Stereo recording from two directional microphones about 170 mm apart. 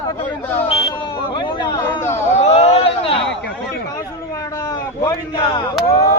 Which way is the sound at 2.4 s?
40° left (ahead or behind).